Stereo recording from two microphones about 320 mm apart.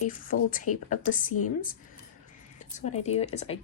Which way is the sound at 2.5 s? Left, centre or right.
Left.